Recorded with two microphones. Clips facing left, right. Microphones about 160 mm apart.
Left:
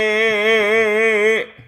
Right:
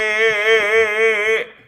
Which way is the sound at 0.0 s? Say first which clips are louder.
Left 2 dB; 25° left (ahead or behind).